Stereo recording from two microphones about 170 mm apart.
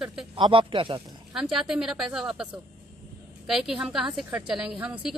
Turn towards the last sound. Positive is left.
turn(degrees=-5)  # may be behind; listen again after turning